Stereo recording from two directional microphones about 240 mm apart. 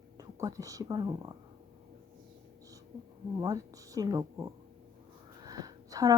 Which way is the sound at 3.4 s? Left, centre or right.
Centre.